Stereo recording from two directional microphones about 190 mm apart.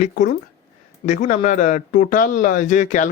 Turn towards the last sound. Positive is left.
turn(degrees=40)  # may be behind; listen again after turning